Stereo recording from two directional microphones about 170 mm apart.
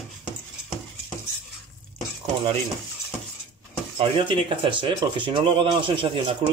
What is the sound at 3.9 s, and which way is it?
Speech, 30° right (ahead or behind).